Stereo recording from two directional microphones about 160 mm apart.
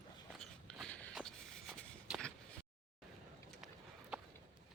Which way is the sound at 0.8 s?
10° left (ahead or behind).